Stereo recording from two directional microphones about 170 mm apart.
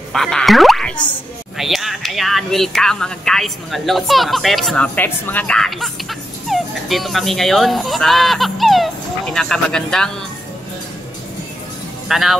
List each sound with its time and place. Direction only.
0.1 s speech: 5° left (ahead or behind)
12.1 s speech: centre (ahead or behind)